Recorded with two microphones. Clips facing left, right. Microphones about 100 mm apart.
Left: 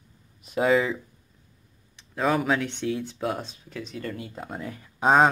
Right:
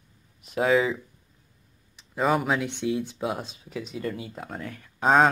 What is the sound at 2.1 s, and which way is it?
Speech, 5° right (ahead or behind).